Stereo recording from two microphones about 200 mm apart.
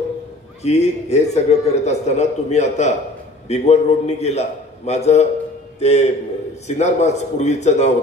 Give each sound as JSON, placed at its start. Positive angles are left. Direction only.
{"t": 0.7, "sound": "a man's voice", "side_deg": 35}